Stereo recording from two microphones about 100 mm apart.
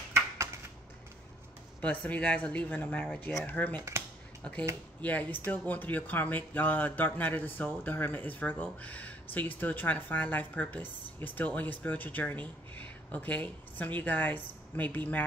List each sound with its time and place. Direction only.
1.8 s speech: 15° left (ahead or behind)